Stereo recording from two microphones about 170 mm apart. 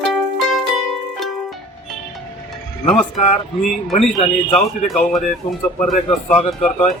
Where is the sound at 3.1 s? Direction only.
40° left (ahead or behind).